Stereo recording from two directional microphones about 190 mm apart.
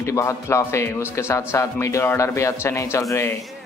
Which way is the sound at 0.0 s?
15° left (ahead or behind).